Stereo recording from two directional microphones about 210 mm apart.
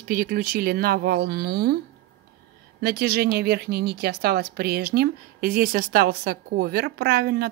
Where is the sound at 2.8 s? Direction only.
50° right (ahead or behind).